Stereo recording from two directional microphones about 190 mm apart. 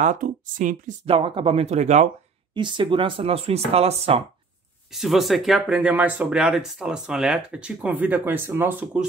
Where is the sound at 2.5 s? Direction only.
25° right (ahead or behind).